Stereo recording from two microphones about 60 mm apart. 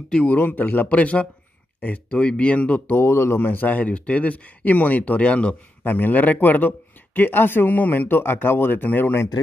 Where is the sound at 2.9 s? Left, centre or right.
Left; by 5.6 s centre.